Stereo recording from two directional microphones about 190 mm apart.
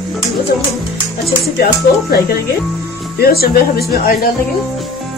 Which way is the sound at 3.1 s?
55° left (ahead or behind).